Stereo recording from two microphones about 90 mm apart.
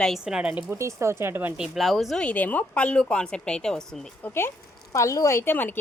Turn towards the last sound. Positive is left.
turn(degrees=20)  # may be behind; listen again after turning